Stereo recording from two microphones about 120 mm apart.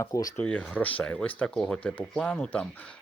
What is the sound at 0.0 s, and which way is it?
Speech, 30° left (ahead or behind).